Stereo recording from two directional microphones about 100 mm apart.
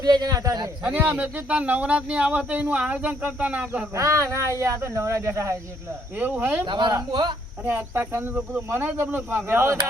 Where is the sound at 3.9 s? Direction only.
35° right (ahead or behind).